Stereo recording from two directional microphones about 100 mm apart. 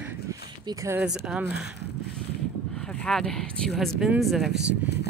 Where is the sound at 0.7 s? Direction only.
35° right (ahead or behind).